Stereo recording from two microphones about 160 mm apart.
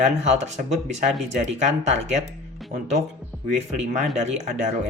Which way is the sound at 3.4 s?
50° right (ahead or behind).